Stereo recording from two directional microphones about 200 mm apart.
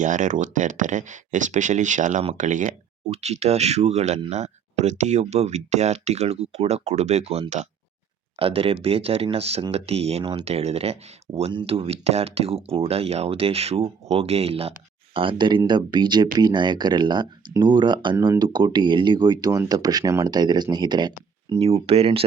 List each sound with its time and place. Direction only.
0.0 s speech: 40° right (ahead or behind)